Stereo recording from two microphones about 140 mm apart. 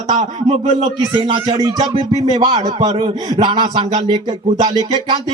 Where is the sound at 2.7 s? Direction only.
40° right (ahead or behind).